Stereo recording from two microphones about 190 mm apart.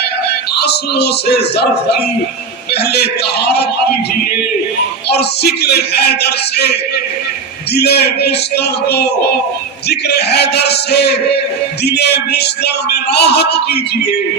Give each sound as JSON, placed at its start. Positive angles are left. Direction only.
{"t": 0.6, "sound": "speech", "side_deg": 60}
{"t": 2.9, "sound": "speech", "side_deg": 60}
{"t": 5.0, "sound": "speech", "side_deg": 60}
{"t": 7.8, "sound": "speech", "side_deg": 60}